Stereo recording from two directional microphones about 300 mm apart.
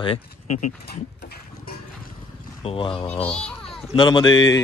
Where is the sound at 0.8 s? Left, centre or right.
Left.